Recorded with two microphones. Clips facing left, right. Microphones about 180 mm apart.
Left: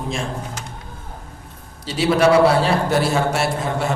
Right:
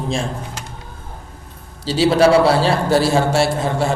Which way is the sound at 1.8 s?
30° right (ahead or behind).